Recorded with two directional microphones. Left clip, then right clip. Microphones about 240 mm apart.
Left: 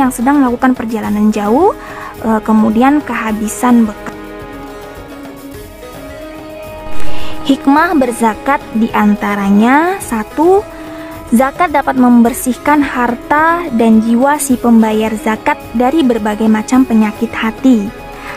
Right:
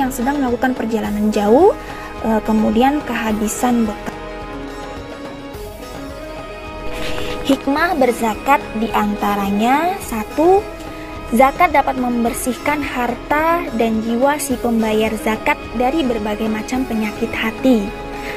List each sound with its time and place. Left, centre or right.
0.0 s a woman's voice: centre
7.4 s speech: centre
11.3 s a woman's voice: centre